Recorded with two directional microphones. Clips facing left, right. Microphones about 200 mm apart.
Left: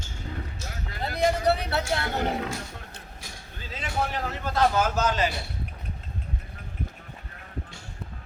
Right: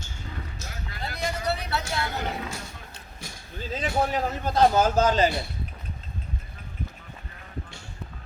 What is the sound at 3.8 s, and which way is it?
A man's voice, 40° right (ahead or behind).